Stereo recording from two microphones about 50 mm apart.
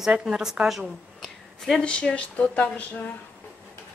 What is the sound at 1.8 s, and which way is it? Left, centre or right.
Speech, left.